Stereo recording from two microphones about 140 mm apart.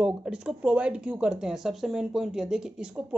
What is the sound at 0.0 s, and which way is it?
Speech, 5° right (ahead or behind).